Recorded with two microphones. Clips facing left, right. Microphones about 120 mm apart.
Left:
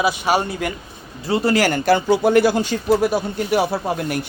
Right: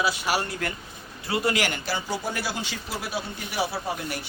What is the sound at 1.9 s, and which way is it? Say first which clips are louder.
Speech: left 15 dB; 65° left (ahead or behind).